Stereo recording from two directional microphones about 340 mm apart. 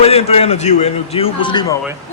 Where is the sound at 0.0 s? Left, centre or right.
Centre.